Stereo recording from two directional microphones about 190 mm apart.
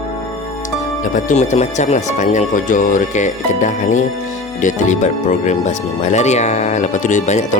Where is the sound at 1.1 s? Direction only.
40° left (ahead or behind).